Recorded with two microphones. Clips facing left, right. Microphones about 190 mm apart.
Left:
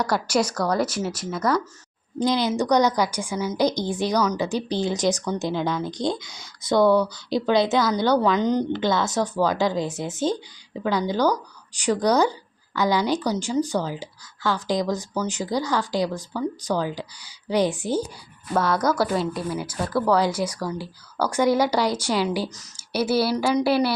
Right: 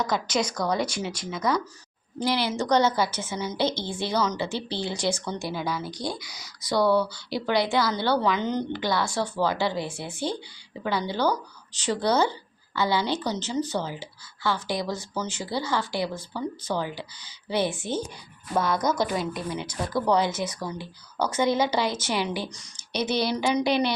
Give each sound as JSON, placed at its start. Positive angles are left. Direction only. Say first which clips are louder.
{"t": 0.0, "sound": "a woman's voice", "louder": "left 4 dB", "side_deg": 10}
{"t": 2.1, "sound": "a woman's voice", "louder": "left 4 dB", "side_deg": 20}
{"t": 5.5, "sound": "speech", "louder": "left 5 dB", "side_deg": -10}
{"t": 5.9, "sound": "a woman's voice", "louder": "left 6 dB", "side_deg": 20}
{"t": 17.5, "sound": "a woman's voice", "louder": "left 5 dB", "side_deg": 15}
{"t": 18.5, "sound": "speech", "louder": "left 3 dB", "side_deg": -15}
{"t": 18.8, "sound": "a woman's voice", "louder": "left 3 dB", "side_deg": 10}
{"t": 19.1, "sound": "speech", "louder": "left 4 dB", "side_deg": -15}
{"t": 19.5, "sound": "a woman's voice", "louder": "left 2 dB", "side_deg": 5}
{"t": 23.3, "sound": "speech", "louder": "left 3 dB", "side_deg": -20}
{"t": 23.6, "sound": "a woman's voice", "louder": "left 4 dB", "side_deg": 5}